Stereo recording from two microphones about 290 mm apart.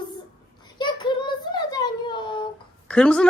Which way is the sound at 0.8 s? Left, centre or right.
Centre.